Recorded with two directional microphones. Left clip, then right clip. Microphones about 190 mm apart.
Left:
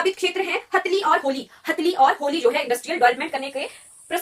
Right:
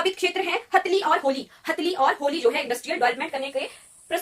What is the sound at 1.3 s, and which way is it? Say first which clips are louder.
Speech: left 1 dB; 10° right (ahead or behind).